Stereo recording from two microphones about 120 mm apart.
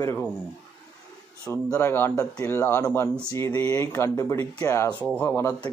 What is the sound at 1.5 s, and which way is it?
Speech, 20° left (ahead or behind).